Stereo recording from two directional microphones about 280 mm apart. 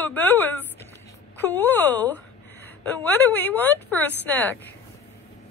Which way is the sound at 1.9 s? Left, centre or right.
Left.